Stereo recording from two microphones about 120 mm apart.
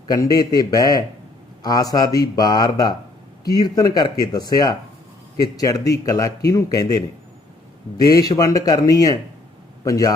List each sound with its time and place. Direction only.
0.1 s speech: 30° left (ahead or behind)
8.0 s speech: 30° left (ahead or behind)